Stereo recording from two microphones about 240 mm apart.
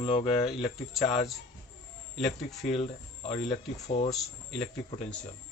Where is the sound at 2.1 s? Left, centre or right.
Centre.